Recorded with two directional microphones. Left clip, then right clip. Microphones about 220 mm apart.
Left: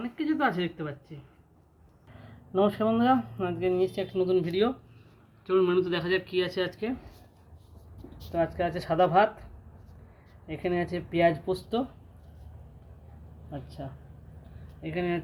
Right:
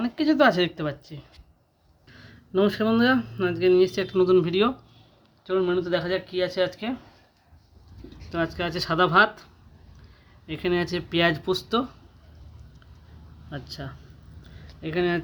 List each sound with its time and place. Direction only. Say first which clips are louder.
0.0 s speech: right 8 dB; 55° right (ahead or behind)
2.5 s speech: right 3 dB; 60° right (ahead or behind)
5.5 s speech: right 1 dB; 15° right (ahead or behind)
6.7 s speech: right 2 dB; 40° right (ahead or behind)
8.3 s speech: even; 65° right (ahead or behind)
10.4 s speech: right 4 dB; 65° right (ahead or behind)
14.8 s speech: right 6 dB; 55° right (ahead or behind)